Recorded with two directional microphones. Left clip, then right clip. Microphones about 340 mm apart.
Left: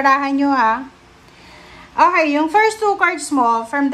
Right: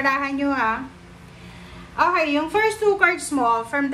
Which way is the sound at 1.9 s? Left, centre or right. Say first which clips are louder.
Left 6 dB; centre.